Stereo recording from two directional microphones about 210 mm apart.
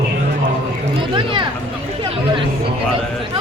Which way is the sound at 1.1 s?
25° right (ahead or behind).